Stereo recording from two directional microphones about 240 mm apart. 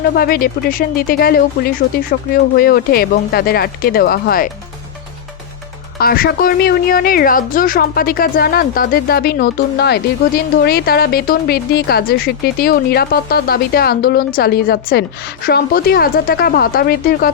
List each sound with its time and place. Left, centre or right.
0.2 s a woman's voice: left
6.0 s a woman's voice: left